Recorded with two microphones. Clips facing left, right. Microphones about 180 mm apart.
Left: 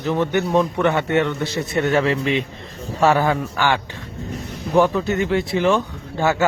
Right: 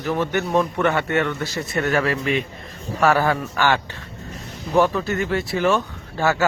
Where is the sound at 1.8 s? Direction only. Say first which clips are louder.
Left 3 dB; 20° left (ahead or behind).